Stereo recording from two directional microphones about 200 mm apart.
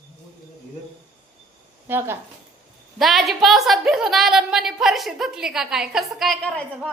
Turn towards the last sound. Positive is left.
turn(degrees=5)  # may be behind; listen again after turning